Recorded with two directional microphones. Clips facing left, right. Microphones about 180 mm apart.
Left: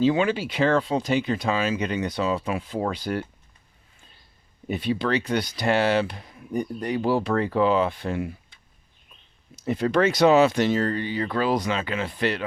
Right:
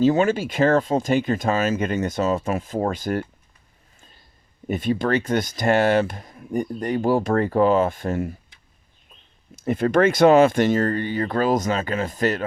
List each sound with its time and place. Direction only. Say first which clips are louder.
0.0 s speech: right 3 dB; 45° right (ahead or behind)
4.7 s speech: right 3 dB; 45° right (ahead or behind)
9.6 s speech: right 3 dB; 50° right (ahead or behind)